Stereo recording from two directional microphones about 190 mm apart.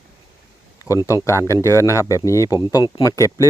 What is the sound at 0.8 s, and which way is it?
Speech, 15° left (ahead or behind).